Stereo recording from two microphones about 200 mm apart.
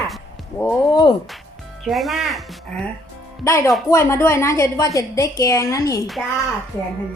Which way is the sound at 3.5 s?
15° left (ahead or behind).